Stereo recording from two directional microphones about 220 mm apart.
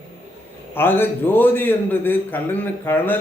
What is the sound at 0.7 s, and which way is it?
A man's voice, 10° left (ahead or behind).